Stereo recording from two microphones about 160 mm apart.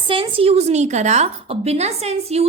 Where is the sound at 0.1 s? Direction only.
35° right (ahead or behind).